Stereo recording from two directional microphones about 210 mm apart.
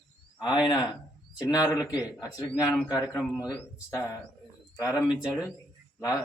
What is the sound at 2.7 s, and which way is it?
A man's voice, centre (ahead or behind).